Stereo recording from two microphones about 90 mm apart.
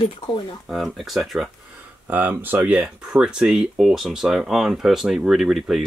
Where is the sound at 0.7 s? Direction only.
Centre (ahead or behind).